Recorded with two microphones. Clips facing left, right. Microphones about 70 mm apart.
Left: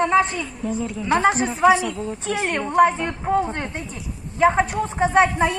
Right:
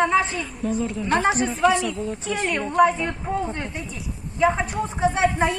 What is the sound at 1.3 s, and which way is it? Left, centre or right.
Speech, centre.